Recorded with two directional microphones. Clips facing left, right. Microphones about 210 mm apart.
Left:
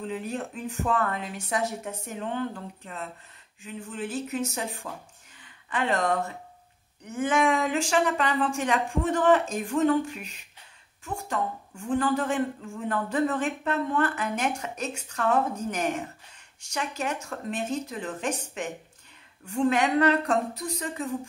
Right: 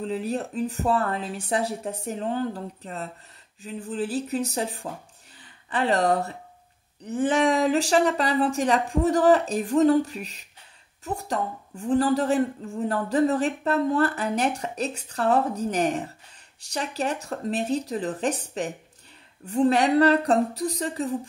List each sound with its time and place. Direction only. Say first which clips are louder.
0.0 s a woman's voice: right 4 dB; 35° right (ahead or behind)